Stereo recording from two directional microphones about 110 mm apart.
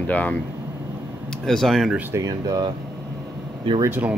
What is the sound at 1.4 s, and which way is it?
Speech, centre (ahead or behind).